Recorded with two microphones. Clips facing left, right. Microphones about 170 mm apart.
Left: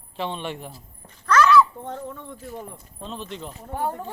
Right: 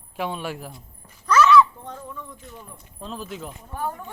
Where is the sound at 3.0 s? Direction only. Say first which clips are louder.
Right 1 dB; 5° right (ahead or behind).